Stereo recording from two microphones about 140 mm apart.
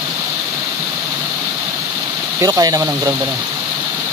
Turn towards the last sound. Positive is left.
turn(degrees=-25)  # may be behind; listen again after turning